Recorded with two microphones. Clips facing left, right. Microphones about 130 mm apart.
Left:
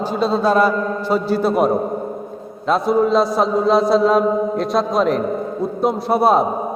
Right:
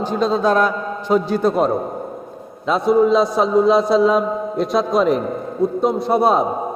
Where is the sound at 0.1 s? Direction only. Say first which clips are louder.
Even; 5° left (ahead or behind).